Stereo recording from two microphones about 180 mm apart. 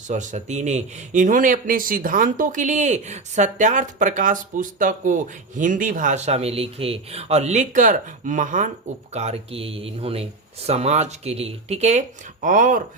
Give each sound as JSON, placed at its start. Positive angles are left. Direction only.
{"t": 0.1, "sound": "speech", "side_deg": -40}